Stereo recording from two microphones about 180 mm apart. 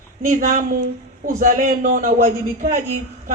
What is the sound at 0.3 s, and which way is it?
A man's voice, 50° right (ahead or behind).